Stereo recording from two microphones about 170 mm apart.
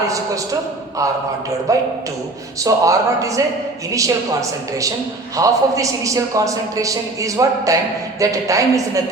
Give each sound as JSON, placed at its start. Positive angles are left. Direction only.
{"t": 1.7, "sound": "a man's voice", "side_deg": -20}